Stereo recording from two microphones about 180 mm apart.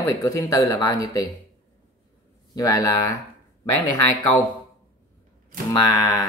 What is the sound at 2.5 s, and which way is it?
Speech, 20° left (ahead or behind).